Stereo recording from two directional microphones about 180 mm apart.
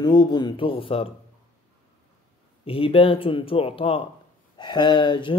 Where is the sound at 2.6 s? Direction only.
30° left (ahead or behind).